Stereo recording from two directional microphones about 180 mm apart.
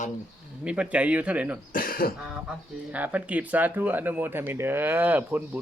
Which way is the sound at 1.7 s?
50° left (ahead or behind).